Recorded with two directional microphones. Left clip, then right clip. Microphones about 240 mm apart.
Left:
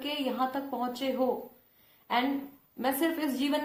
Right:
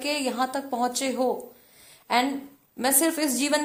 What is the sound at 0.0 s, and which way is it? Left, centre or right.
A woman's voice, right.